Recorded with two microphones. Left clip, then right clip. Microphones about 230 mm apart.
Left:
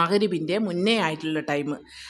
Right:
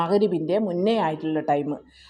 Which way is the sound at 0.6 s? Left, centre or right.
Left.